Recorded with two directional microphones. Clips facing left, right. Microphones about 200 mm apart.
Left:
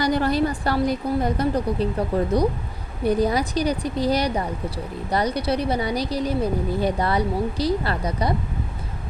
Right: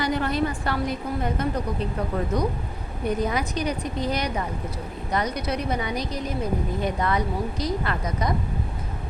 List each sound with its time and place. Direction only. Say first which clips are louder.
0.0 s speech: left 4 dB; 35° left (ahead or behind)